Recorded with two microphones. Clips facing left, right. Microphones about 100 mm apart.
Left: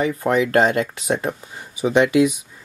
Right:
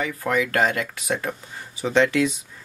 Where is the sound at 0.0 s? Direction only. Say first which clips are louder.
Left 5 dB; 25° left (ahead or behind).